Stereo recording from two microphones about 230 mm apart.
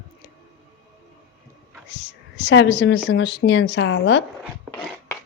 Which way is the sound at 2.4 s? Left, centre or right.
Left.